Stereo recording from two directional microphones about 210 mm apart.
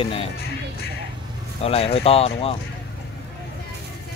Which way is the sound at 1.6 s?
25° left (ahead or behind).